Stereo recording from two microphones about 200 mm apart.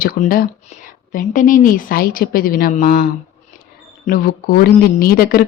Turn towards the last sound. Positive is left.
turn(degrees=45)  # may be behind; listen again after turning